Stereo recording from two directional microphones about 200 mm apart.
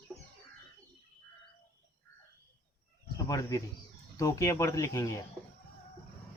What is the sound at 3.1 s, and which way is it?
Bird, 15° left (ahead or behind).